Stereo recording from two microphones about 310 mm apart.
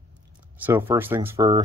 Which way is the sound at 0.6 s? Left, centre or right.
Centre.